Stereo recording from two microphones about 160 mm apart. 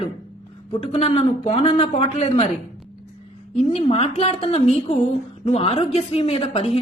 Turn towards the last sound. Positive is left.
turn(degrees=40)  # may be behind; listen again after turning